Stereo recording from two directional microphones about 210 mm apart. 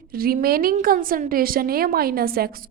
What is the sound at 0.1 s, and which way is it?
A woman's voice, 45° right (ahead or behind).